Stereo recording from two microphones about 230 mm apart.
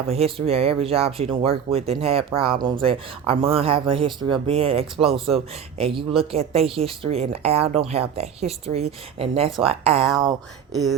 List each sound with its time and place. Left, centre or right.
0.1 s speech: right